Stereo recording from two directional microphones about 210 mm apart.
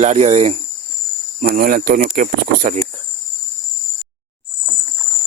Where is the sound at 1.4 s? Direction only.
45° right (ahead or behind).